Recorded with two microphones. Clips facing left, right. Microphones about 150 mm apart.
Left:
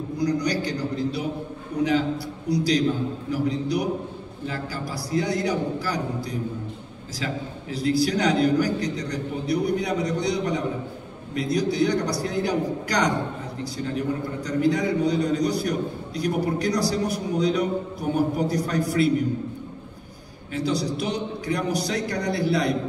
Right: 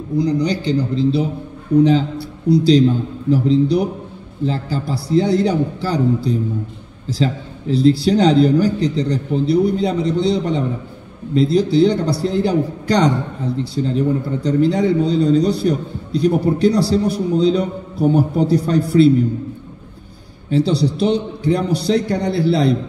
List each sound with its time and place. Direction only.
0.2 s a man's voice: 25° right (ahead or behind)
7.7 s a man's voice: 30° right (ahead or behind)
20.4 s a man's voice: 30° right (ahead or behind)